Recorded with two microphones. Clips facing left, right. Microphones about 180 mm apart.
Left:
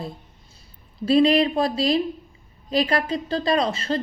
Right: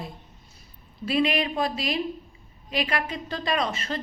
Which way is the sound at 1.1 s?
35° left (ahead or behind).